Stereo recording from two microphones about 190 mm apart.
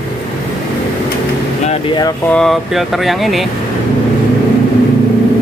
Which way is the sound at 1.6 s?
25° left (ahead or behind).